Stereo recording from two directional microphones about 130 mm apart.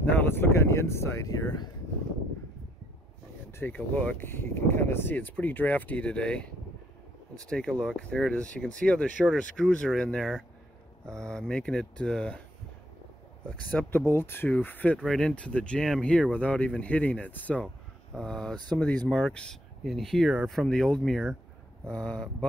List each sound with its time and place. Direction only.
0.0 s a sound: 15° left (ahead or behind); by 1.7 s 30° left (ahead or behind)
3.5 s speech: 15° left (ahead or behind)
13.5 s speech: 10° left (ahead or behind)